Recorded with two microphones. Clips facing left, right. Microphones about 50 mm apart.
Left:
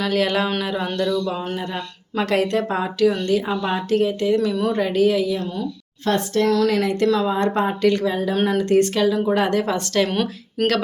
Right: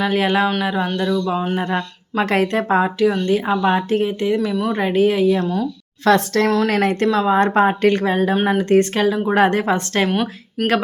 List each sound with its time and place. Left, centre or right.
0.0 s speech: right
0.6 s a sound: centre
0.9 s speech: right
1.3 s a sound: centre
1.5 s speech: right
5.3 s speech: right
6.1 s a woman's voice: right
6.7 s speech: right
7.1 s speech: right
8.4 s speech: right
8.7 s speech: right
10.1 s speech: centre